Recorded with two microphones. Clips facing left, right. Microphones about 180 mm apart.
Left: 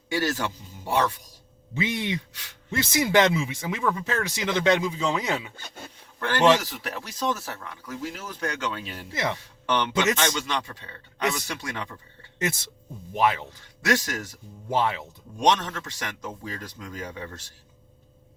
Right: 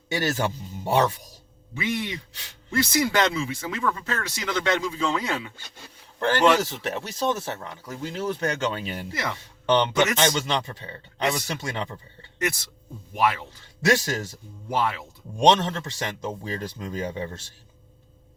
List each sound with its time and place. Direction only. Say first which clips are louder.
0.1 s a man's voice: right 1 dB; 25° right (ahead or behind)
1.7 s a man's voice: left 1 dB; 20° left (ahead or behind)
5.5 s speech: left 5 dB; 55° left (ahead or behind)
6.7 s speech: right 4 dB; 25° right (ahead or behind)
9.1 s a man's voice: left 5 dB; 20° left (ahead or behind)
9.6 s speech: right 3 dB; 25° right (ahead or behind)
13.1 s a man's voice: even; 20° left (ahead or behind)
13.8 s speech: right 3 dB; 25° right (ahead or behind)
14.7 s a man's voice: left 1 dB; 20° left (ahead or behind)
15.4 s speech: right 4 dB; 30° right (ahead or behind)